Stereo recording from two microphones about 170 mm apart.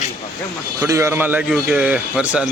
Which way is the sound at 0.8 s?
15° right (ahead or behind).